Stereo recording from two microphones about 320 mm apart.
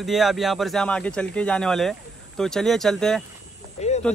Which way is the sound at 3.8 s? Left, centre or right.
Left.